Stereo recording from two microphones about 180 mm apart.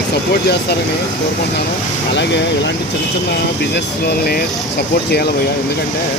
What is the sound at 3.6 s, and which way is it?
Speech, 70° left (ahead or behind).